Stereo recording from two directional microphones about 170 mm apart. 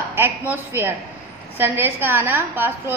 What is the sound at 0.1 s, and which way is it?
A woman's voice, 10° right (ahead or behind).